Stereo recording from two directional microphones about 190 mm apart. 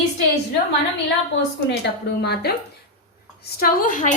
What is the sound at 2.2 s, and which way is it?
Speech, 60° left (ahead or behind).